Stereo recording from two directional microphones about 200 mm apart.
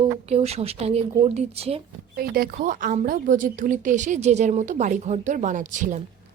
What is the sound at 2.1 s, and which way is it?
A woman's voice, 50° right (ahead or behind).